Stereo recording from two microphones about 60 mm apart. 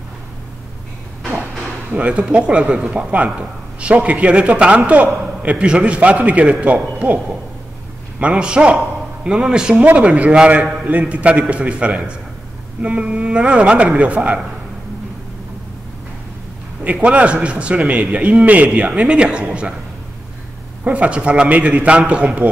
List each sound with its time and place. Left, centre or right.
2.0 s a man's voice: right
8.2 s a man's voice: centre
16.8 s a man's voice: right
20.8 s a man's voice: right